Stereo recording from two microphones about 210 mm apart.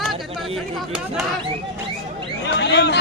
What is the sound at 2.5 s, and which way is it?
Speech, 55° left (ahead or behind).